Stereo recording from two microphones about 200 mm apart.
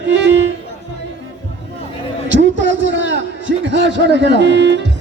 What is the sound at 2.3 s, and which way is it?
A man's voice, 65° right (ahead or behind).